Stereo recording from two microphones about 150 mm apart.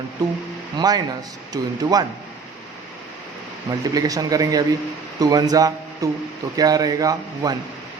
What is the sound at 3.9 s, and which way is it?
Speech, 25° right (ahead or behind).